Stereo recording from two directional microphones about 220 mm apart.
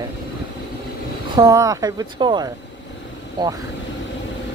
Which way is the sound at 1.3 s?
15° right (ahead or behind).